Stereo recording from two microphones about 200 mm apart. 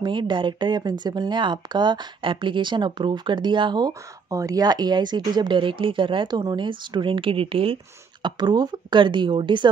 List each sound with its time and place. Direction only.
0.0 s speech: 25° right (ahead or behind)